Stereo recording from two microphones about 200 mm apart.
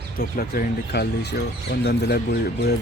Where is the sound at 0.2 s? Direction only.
50° left (ahead or behind).